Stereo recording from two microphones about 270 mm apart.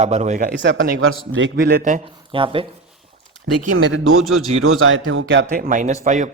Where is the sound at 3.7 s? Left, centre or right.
Right.